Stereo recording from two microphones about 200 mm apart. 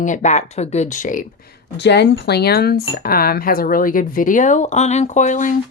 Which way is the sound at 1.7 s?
55° left (ahead or behind).